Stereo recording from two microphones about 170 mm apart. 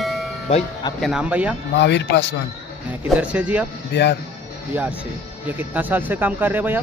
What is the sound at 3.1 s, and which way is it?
Speech, 5° right (ahead or behind).